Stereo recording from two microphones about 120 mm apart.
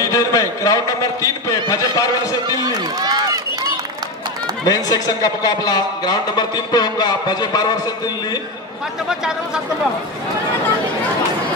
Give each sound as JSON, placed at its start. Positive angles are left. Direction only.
{"t": 0.0, "sound": "a man's voice", "side_deg": 30}
{"t": 2.6, "sound": "run", "side_deg": -35}
{"t": 4.6, "sound": "a man's voice", "side_deg": 30}